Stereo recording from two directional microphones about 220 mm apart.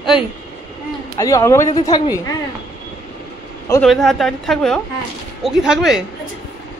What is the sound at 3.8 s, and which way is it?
A woman's voice, centre (ahead or behind).